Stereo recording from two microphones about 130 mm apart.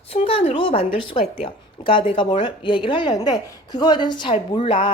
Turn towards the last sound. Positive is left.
turn(degrees=45)  # may be behind; listen again after turning